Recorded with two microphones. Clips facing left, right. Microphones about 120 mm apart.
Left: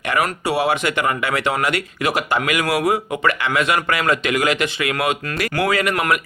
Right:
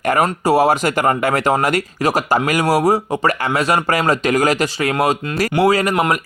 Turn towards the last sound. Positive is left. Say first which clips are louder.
# right 4 dB
turn(degrees=-30)  # may be behind; listen again after turning